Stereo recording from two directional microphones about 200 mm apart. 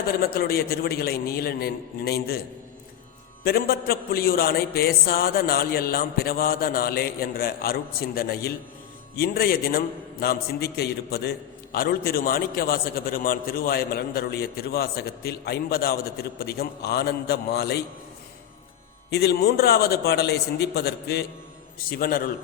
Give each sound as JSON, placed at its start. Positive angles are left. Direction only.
{"t": 0.1, "sound": "a man's voice", "side_deg": 50}
{"t": 3.4, "sound": "a man's voice", "side_deg": 50}
{"t": 19.1, "sound": "a man's voice", "side_deg": 55}